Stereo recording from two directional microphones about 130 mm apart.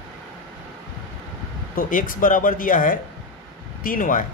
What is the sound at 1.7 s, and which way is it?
Speech, 90° left.